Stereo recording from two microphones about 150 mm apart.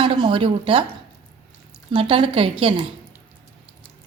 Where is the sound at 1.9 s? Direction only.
35° right (ahead or behind).